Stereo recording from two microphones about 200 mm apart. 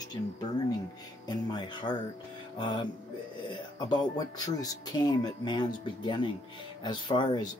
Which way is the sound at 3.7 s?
20° left (ahead or behind).